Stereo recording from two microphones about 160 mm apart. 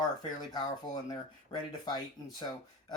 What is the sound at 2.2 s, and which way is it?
Speech, 25° left (ahead or behind).